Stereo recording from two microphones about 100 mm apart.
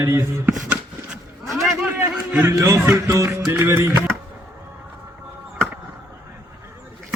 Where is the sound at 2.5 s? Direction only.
30° right (ahead or behind).